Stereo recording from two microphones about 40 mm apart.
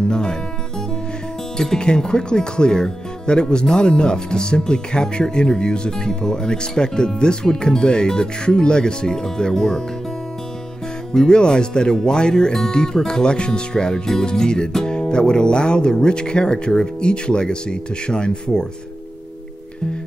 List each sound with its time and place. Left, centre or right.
0.1 s speech: left
1.8 s speech: centre
11.1 s speech: centre